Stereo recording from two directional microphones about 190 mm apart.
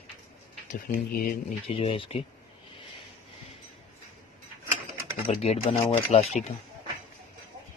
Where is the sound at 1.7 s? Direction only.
30° left (ahead or behind).